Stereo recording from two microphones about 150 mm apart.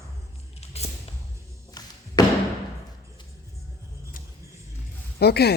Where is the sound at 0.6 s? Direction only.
45° left (ahead or behind).